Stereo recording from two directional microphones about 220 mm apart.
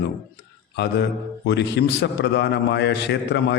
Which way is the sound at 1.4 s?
50° left (ahead or behind).